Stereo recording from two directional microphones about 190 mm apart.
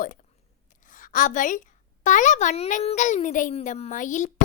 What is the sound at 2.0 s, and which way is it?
A child's voice, 40° left (ahead or behind).